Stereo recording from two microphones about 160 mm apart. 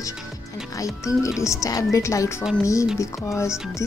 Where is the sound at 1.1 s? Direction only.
20° left (ahead or behind).